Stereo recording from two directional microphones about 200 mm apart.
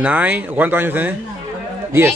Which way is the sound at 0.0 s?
10° right (ahead or behind).